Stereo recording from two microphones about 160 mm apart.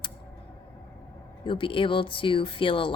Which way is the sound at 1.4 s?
30° left (ahead or behind).